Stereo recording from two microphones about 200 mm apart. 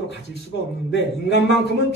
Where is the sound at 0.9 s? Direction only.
60° left (ahead or behind).